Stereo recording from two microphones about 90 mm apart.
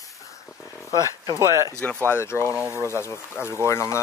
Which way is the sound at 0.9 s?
40° right (ahead or behind).